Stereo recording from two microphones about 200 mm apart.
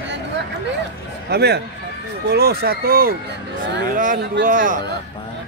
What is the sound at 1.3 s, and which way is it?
Speech, 55° right (ahead or behind).